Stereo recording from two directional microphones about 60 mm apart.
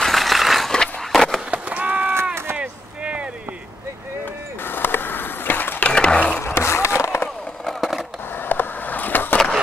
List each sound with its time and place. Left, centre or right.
0.0 s a sound: centre
1.5 s a sound: right
4.6 s skateboard: left
5.9 s skateboard: centre
6.4 s skateboard: left
7.6 s skateboard: centre
8.4 s skateboard: left